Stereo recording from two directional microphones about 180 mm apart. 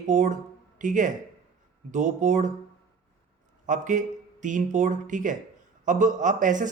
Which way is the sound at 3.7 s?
45° right (ahead or behind).